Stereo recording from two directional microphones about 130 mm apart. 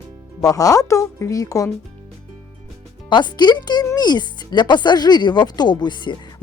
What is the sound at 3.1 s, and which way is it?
Speech, 35° left (ahead or behind).